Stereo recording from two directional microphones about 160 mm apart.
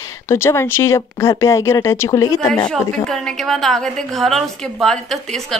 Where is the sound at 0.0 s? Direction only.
15° left (ahead or behind).